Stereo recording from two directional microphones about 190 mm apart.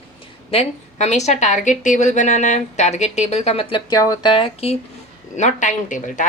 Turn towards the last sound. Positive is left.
turn(degrees=40)  # may be behind; listen again after turning